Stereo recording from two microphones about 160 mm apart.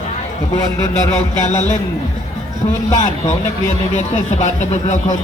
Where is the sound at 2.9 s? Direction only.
50° left (ahead or behind).